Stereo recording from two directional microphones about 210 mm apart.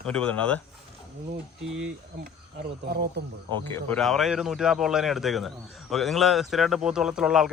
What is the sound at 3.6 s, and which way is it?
Speech, 10° left (ahead or behind).